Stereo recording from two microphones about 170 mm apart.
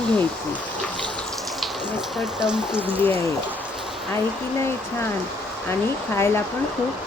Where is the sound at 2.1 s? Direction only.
5° right (ahead or behind).